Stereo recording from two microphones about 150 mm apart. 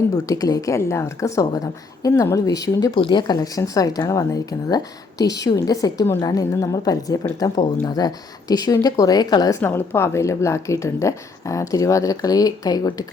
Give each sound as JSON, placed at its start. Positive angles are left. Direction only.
{"t": 0.3, "sound": "speech", "side_deg": 25}